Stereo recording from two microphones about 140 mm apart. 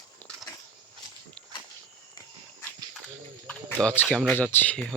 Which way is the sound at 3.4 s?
10° left (ahead or behind).